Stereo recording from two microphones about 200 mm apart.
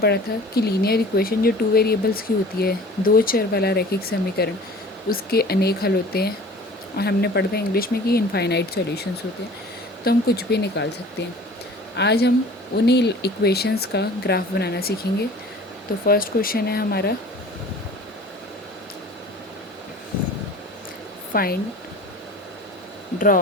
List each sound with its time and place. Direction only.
0.0 s speech: 50° left (ahead or behind)
11.9 s speech: 55° left (ahead or behind)
16.0 s speech: 45° left (ahead or behind)
21.3 s speech: 50° left (ahead or behind)
23.1 s speech: 45° left (ahead or behind)